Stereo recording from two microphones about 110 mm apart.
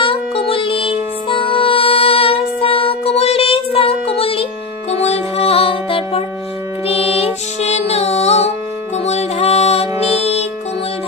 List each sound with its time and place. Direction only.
0.0 s music: 55° left (ahead or behind)
4.9 s music: 75° left (ahead or behind)